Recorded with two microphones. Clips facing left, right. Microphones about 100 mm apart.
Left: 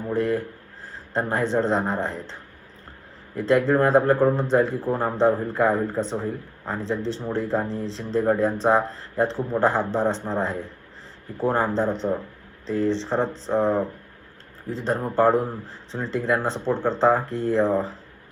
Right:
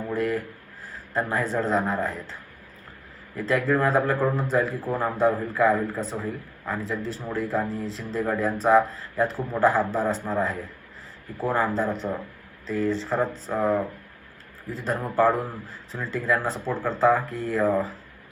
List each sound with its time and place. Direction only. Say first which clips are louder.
0.1 s speech: left 4 dB; 30° left (ahead or behind)
3.3 s speech: left 4 dB; 25° left (ahead or behind)